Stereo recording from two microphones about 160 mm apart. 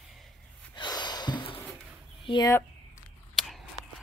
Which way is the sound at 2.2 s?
30° left (ahead or behind).